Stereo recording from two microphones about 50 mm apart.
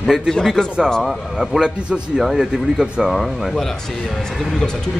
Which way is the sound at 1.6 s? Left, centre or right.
Centre.